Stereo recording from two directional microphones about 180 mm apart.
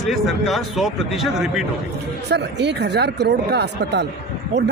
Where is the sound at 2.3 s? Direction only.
70° right (ahead or behind).